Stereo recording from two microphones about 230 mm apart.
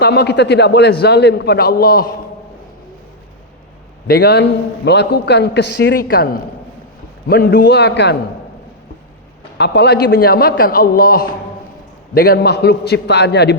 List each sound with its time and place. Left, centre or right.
0.0 s a man's voice: left
4.0 s a man's voice: left
9.6 s a man's voice: left